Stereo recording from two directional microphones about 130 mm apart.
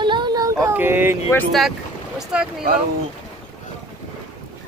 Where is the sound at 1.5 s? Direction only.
Centre (ahead or behind).